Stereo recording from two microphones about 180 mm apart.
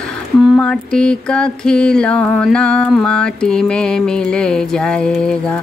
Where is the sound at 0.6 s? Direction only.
5° left (ahead or behind).